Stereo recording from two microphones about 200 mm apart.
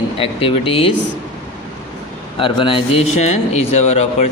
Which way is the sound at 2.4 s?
25° left (ahead or behind).